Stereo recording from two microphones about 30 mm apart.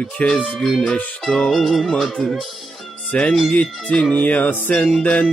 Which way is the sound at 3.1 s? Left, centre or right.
Left.